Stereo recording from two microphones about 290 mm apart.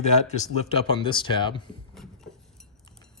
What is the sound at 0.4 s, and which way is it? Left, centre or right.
Speech, centre.